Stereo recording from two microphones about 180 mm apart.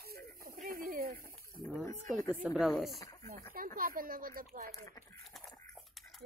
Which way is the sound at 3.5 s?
50° right (ahead or behind).